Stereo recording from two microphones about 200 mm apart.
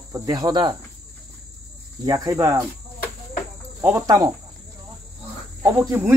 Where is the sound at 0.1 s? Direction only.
20° right (ahead or behind).